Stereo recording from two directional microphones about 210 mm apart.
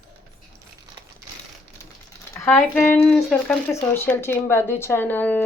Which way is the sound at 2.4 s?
10° left (ahead or behind).